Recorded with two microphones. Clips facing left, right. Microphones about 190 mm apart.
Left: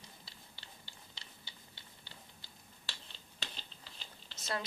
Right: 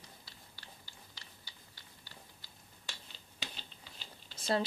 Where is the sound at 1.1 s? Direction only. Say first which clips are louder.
Left 1 dB; 25° left (ahead or behind).